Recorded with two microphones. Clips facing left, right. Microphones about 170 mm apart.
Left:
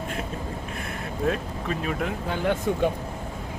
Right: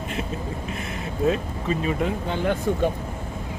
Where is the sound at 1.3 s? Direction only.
Centre (ahead or behind).